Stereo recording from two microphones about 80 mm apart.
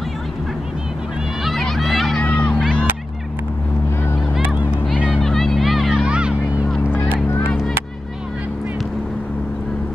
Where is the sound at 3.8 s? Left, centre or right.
Left.